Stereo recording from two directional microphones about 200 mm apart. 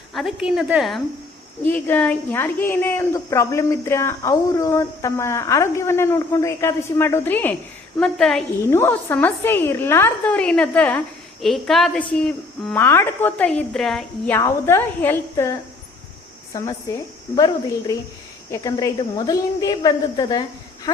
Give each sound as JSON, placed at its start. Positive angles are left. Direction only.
{"t": 0.1, "sound": "a woman's voice", "side_deg": 0}
{"t": 14.3, "sound": "a woman's voice", "side_deg": 10}
{"t": 16.5, "sound": "a woman's voice", "side_deg": 15}